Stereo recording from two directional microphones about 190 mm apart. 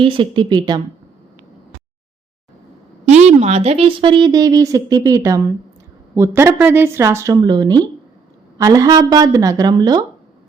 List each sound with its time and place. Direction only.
0.0 s a woman's voice: 25° right (ahead or behind)
3.1 s a woman's voice: 35° right (ahead or behind); by 10.0 s 20° right (ahead or behind)